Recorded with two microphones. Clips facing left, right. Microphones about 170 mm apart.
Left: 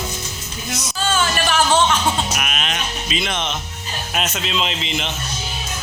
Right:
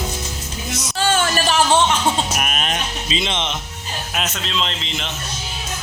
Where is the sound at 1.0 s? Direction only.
65° right (ahead or behind).